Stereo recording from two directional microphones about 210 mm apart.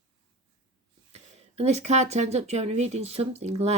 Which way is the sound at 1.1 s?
30° right (ahead or behind).